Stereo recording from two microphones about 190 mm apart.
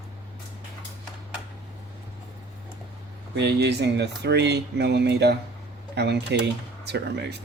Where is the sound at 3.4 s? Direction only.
65° right (ahead or behind).